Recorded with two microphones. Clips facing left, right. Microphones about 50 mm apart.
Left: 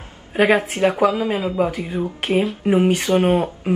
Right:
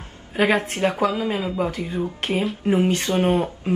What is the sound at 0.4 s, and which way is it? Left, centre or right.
Speech, centre.